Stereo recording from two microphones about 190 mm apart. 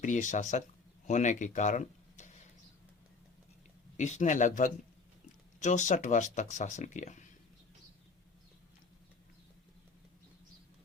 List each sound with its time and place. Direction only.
0.0 s speech: 40° left (ahead or behind)
3.9 s speech: 40° left (ahead or behind)